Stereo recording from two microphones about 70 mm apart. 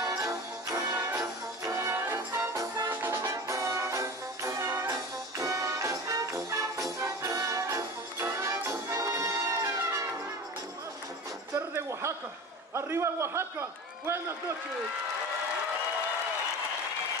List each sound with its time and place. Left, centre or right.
0.0 s music: right
0.8 s brass instrument: right
2.9 s music: right
3.2 s music: right
11.7 s a sound: right